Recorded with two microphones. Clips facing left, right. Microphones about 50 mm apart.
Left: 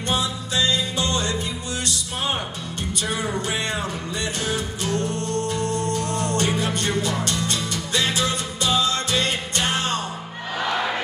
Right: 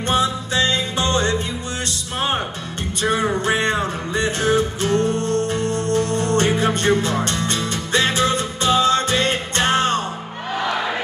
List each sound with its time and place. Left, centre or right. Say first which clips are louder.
0.1 s music: right 5 dB; right